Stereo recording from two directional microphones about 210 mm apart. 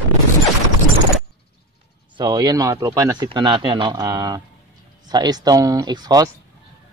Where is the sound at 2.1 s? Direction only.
20° right (ahead or behind).